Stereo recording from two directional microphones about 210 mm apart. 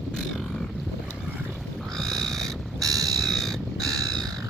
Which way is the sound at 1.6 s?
Centre (ahead or behind).